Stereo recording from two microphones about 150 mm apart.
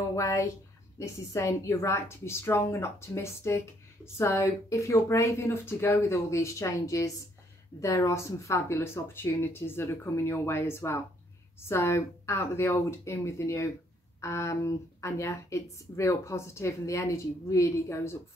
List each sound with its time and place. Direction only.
0.1 s a woman's voice: 20° left (ahead or behind)